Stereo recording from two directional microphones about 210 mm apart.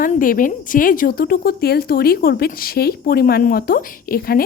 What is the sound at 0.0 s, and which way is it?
Speech, 40° left (ahead or behind).